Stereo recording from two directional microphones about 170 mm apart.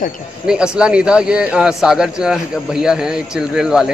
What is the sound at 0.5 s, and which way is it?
Speech, 5° right (ahead or behind).